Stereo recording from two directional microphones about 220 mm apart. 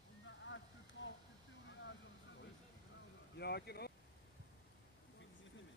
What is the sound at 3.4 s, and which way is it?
Speech, 45° left (ahead or behind).